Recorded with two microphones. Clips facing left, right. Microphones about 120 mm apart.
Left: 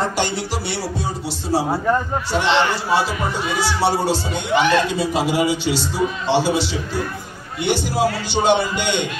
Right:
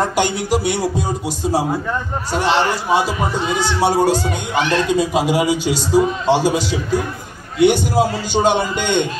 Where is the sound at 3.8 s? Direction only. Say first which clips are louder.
Right 5 dB; 45° right (ahead or behind).